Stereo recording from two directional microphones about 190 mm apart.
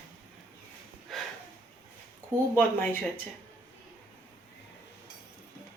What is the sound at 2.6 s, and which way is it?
Speech, 10° left (ahead or behind).